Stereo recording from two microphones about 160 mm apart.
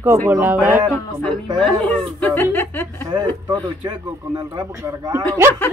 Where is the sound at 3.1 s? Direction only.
25° right (ahead or behind).